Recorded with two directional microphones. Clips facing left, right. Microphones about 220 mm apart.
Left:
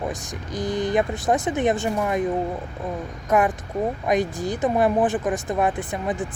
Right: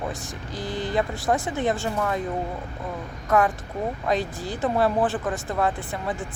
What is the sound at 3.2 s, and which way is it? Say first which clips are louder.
Speech: left 1 dB; 15° left (ahead or behind).